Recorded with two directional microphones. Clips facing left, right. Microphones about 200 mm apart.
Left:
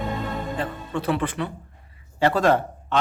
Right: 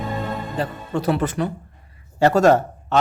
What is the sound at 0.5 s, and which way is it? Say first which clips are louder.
Speech: right 3 dB; 40° right (ahead or behind).